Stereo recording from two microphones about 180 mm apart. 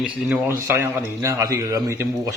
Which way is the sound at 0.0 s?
5° right (ahead or behind).